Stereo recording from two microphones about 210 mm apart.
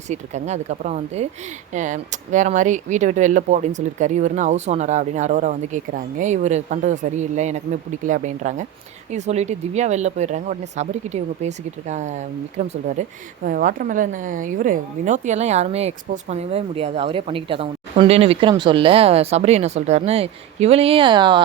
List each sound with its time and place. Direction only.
0.1 s speech: 35° right (ahead or behind)